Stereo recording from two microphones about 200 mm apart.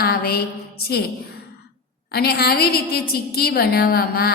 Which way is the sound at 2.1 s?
50° left (ahead or behind).